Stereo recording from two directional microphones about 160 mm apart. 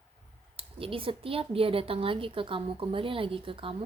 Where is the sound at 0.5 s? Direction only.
35° right (ahead or behind).